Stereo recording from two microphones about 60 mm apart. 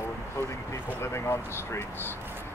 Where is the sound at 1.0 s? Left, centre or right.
Left.